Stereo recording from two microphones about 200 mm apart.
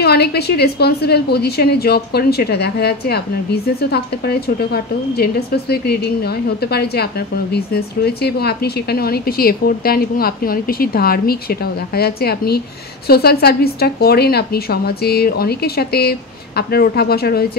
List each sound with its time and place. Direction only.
0.0 s speech: 55° left (ahead or behind)